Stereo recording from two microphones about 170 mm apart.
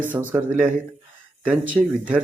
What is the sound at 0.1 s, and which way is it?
Speech, 10° right (ahead or behind).